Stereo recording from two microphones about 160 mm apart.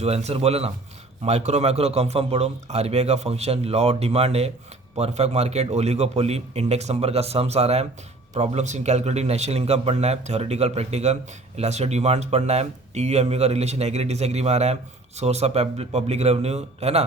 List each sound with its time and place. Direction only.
0.0 s a man's voice: 40° right (ahead or behind)